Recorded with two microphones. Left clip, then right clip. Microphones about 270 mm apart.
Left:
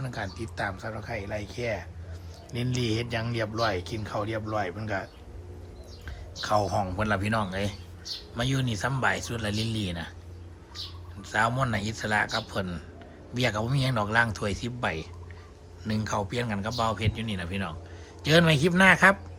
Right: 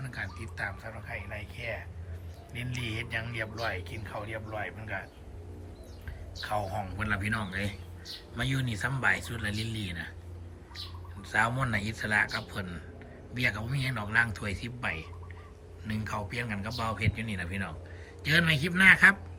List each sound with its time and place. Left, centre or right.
0.0 s a man's voice: centre
1.1 s speech: left
2.5 s a man's voice: centre
6.7 s a man's voice: centre
11.2 s a man's voice: centre